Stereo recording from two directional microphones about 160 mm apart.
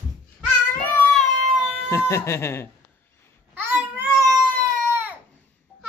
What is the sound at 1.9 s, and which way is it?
Speech, 15° left (ahead or behind).